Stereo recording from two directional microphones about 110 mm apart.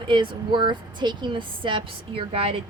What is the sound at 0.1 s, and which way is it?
A woman's voice, 45° right (ahead or behind).